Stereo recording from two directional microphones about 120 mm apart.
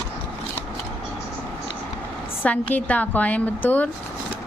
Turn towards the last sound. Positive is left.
turn(degrees=15)  # may be behind; listen again after turning